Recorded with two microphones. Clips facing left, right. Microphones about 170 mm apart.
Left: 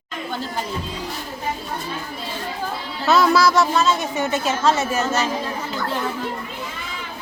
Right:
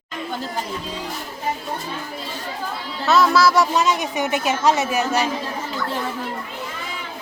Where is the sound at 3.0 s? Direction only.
Centre (ahead or behind).